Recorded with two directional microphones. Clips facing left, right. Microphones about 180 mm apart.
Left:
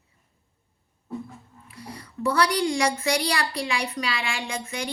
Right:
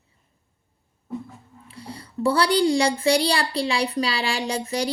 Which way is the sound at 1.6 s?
30° right (ahead or behind).